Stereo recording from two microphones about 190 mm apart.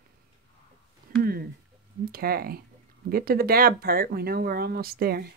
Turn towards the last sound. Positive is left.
turn(degrees=-55)  # may be behind; listen again after turning